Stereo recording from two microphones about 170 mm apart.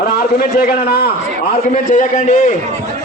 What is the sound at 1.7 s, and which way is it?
Speech, 45° left (ahead or behind).